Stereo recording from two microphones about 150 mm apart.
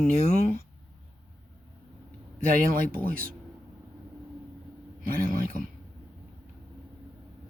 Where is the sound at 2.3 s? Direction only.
65° right (ahead or behind).